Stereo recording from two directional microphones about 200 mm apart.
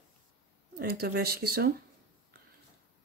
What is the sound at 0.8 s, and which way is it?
Speech, 50° right (ahead or behind).